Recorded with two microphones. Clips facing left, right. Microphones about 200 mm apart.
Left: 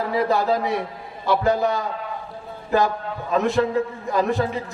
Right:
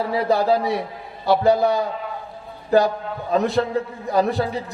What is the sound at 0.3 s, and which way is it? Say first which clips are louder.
A man's voice: right 2 dB; 35° right (ahead or behind).